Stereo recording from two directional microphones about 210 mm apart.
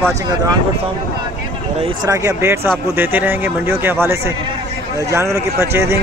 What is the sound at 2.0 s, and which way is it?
Speech, 15° right (ahead or behind).